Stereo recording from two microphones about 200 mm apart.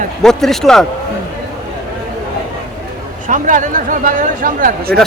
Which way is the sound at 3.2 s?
40° right (ahead or behind).